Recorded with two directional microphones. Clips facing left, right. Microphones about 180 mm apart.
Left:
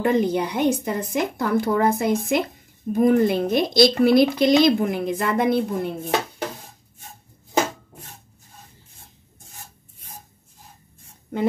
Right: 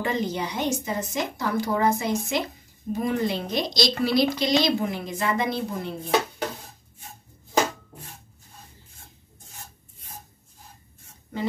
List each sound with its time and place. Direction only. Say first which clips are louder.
0.0 s a woman's voice: left 7 dB; 55° left (ahead or behind)